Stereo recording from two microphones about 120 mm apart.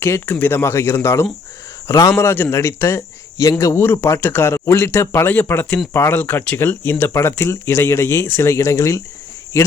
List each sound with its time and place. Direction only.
0.0 s speech: 20° left (ahead or behind)